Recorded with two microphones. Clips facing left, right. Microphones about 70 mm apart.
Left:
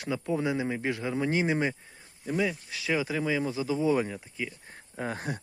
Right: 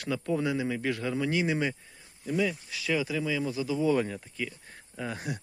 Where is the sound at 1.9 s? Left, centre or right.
Left.